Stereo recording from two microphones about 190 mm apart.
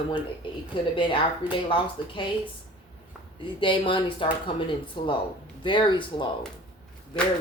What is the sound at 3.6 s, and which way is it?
Speech, 25° left (ahead or behind).